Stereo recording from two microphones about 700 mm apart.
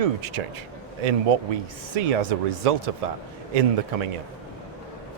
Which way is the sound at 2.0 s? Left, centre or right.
Right.